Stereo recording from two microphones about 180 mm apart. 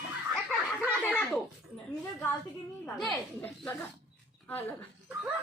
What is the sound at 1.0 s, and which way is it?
Speech, 10° left (ahead or behind).